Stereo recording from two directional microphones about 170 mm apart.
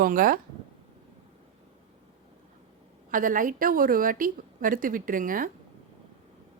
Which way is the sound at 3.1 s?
55° right (ahead or behind).